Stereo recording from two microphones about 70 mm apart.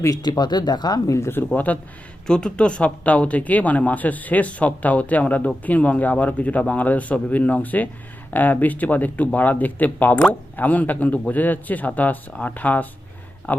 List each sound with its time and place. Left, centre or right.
0.2 s speech: left
1.1 s speech: left
1.5 s speech: left
2.2 s speech: centre